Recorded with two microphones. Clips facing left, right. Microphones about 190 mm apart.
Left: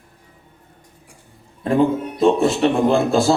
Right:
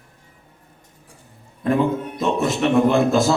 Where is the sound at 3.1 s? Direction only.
30° left (ahead or behind).